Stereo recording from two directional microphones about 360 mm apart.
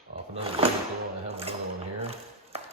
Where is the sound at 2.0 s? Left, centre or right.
Centre.